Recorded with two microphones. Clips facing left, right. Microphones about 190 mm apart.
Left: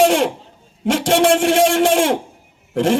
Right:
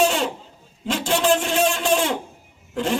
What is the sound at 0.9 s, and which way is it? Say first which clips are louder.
Speech: left 6 dB; 85° left.